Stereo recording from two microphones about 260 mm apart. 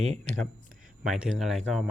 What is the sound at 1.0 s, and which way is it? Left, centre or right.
Speech, centre.